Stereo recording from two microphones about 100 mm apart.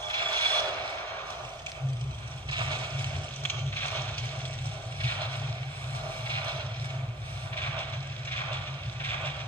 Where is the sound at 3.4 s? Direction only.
20° left (ahead or behind).